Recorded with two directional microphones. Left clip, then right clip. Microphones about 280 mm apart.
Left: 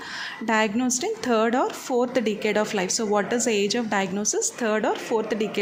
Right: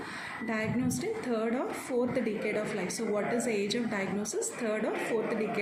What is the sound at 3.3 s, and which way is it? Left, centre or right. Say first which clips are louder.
Speech: left 8 dB; left.